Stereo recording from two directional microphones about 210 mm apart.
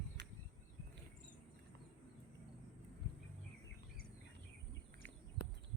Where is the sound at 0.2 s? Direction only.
55° right (ahead or behind).